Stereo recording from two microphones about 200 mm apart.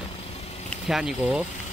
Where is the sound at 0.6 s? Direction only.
Centre (ahead or behind).